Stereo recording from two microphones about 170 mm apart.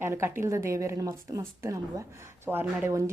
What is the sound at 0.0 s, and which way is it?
A woman's voice, 15° right (ahead or behind).